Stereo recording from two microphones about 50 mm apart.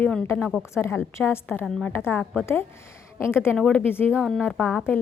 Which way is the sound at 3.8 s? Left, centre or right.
Left.